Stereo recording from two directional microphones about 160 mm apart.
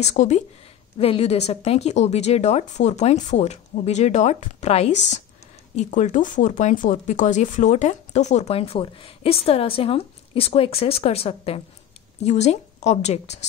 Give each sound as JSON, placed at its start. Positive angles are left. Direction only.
{"t": 0.0, "sound": "speech", "side_deg": 45}